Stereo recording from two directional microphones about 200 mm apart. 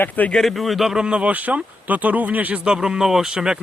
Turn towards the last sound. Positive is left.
turn(degrees=-5)  # may be behind; listen again after turning